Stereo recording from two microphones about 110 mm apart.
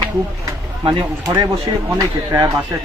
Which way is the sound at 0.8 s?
35° right (ahead or behind).